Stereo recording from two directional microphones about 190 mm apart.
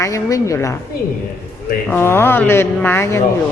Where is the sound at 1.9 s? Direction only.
10° left (ahead or behind).